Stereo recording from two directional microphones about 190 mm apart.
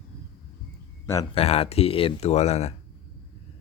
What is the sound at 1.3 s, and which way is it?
Speech, 30° left (ahead or behind).